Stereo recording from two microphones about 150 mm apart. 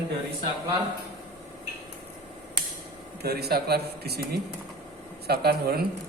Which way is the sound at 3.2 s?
90° right.